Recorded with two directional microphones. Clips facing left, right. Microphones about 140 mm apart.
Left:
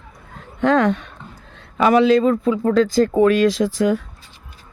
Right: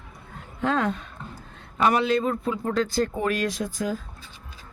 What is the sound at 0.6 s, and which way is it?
Speech, 80° left.